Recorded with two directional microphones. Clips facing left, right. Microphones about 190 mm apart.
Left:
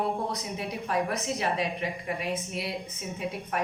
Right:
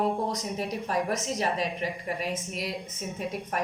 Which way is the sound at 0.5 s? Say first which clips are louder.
Left 1 dB; 40° right (ahead or behind).